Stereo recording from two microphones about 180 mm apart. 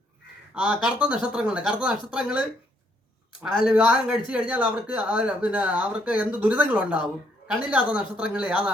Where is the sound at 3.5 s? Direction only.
5° right (ahead or behind).